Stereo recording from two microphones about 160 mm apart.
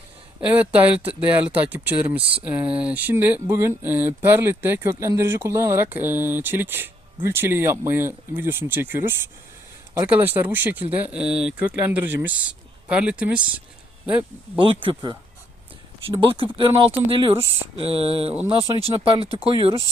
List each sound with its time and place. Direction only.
0.4 s speech: 10° right (ahead or behind)
14.6 s speech: 30° right (ahead or behind)
16.2 s speech: 35° right (ahead or behind)